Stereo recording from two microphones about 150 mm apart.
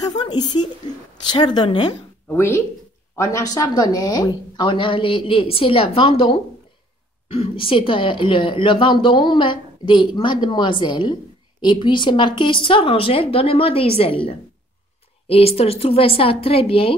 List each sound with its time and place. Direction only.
0.0 s a woman's voice: 30° left (ahead or behind)
2.2 s a woman's voice: 15° left (ahead or behind); by 16.9 s 40° left (ahead or behind)